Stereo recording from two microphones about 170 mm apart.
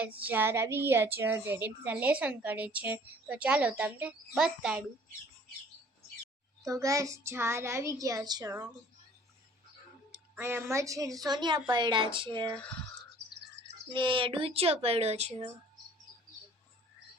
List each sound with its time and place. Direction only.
0.3 s a woman's voice: 15° right (ahead or behind)
6.6 s a child's voice: 20° right (ahead or behind)
10.3 s a child's voice: 15° right (ahead or behind)
13.9 s speech: 30° right (ahead or behind)